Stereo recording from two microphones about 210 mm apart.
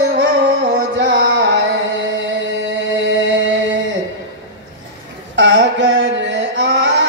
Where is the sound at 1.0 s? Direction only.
60° right (ahead or behind).